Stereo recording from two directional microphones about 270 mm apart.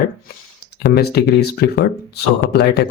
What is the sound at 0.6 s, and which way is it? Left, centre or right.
Speech, left.